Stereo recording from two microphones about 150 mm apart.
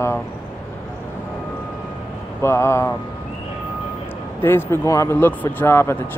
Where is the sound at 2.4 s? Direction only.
15° left (ahead or behind).